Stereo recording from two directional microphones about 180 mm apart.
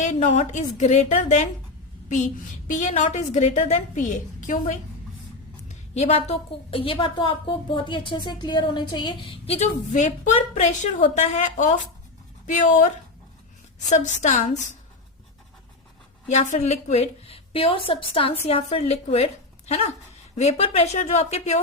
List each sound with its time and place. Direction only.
0.0 s a woman's voice: 40° left (ahead or behind)
13.9 s a woman's voice: 40° left (ahead or behind)
16.3 s a woman's voice: 40° left (ahead or behind)